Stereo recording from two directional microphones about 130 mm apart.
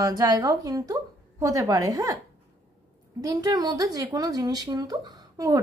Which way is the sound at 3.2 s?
30° right (ahead or behind).